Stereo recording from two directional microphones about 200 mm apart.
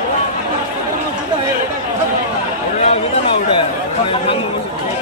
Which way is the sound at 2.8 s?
30° left (ahead or behind).